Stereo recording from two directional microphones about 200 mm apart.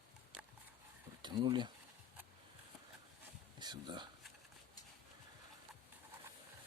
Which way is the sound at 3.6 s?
20° right (ahead or behind).